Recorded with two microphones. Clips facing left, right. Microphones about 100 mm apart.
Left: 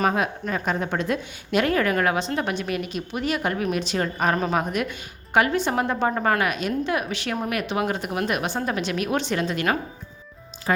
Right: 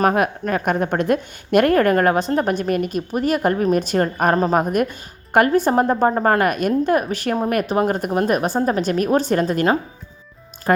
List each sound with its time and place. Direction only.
0.0 s a woman's voice: 55° right (ahead or behind)
10.7 s a woman's voice: 50° right (ahead or behind)